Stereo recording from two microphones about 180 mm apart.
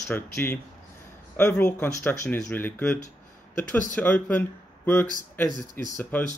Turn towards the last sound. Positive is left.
turn(degrees=10)  # may be behind; listen again after turning